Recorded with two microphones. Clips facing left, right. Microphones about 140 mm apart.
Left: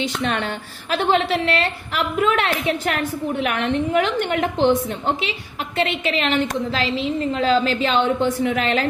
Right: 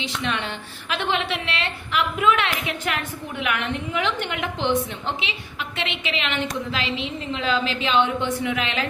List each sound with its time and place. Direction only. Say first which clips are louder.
0.0 s a woman's voice: left 5 dB; 45° left (ahead or behind)